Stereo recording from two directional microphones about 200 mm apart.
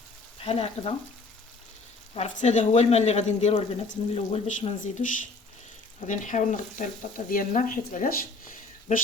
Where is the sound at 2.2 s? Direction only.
35° left (ahead or behind).